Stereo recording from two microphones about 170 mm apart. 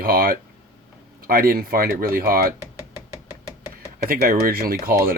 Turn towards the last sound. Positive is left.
turn(degrees=-60)  # may be behind; listen again after turning